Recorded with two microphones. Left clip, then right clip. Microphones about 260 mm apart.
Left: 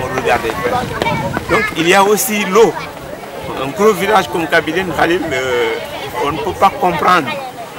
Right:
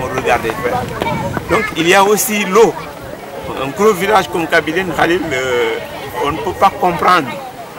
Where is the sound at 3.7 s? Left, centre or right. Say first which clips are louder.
Even; centre.